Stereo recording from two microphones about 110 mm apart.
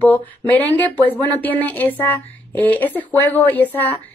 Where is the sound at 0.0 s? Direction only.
15° left (ahead or behind).